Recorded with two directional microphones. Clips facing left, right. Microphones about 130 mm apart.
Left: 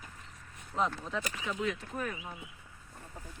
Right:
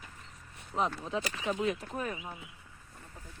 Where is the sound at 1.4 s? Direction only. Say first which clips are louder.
Right 5 dB; 30° right (ahead or behind).